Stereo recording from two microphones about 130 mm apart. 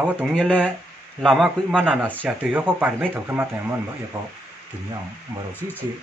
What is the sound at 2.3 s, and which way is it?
Speech, 10° right (ahead or behind).